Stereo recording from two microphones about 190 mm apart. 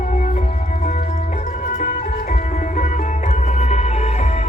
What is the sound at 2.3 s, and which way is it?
Music, 40° left (ahead or behind).